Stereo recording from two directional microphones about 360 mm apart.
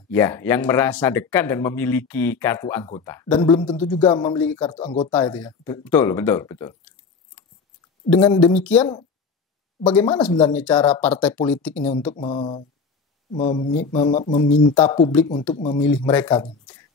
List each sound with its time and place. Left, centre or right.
0.1 s speech: centre
8.1 s speech: centre
12.2 s speech: centre